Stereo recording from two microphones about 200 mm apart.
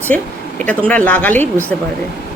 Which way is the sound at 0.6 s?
5° left (ahead or behind).